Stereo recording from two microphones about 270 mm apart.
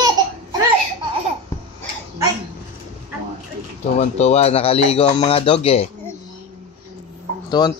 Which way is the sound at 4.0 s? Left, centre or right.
Left.